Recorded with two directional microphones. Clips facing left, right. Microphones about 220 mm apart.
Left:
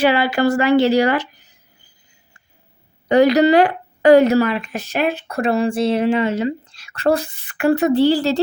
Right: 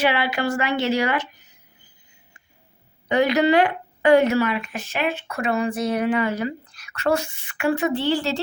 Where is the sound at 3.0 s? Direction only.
35° left (ahead or behind).